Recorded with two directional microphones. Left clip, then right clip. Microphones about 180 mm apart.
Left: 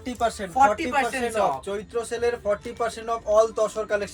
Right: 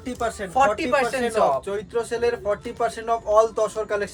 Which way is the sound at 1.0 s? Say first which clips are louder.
Even; centre (ahead or behind).